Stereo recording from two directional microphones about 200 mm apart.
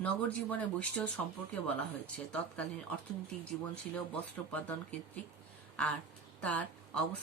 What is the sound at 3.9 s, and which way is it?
Speech, 5° left (ahead or behind).